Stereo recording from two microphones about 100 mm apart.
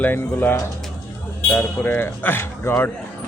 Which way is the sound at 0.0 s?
20° left (ahead or behind).